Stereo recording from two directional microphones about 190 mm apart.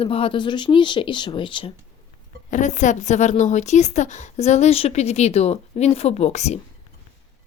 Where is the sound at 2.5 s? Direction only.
40° left (ahead or behind).